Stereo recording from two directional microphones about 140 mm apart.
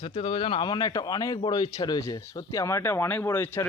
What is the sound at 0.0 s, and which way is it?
A man's voice, 40° left (ahead or behind).